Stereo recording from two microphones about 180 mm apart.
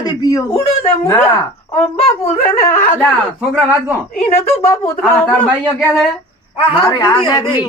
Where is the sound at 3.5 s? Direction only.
Centre (ahead or behind).